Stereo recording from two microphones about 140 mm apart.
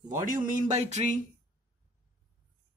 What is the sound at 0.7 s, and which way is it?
Speech, 55° right (ahead or behind).